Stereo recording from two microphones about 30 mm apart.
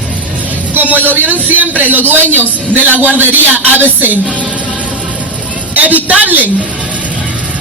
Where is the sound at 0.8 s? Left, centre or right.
Right.